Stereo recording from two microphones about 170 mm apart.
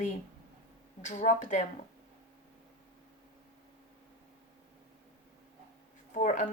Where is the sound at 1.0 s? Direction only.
45° left (ahead or behind).